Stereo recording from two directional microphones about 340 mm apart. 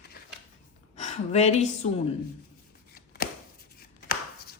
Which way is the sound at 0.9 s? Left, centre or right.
Centre.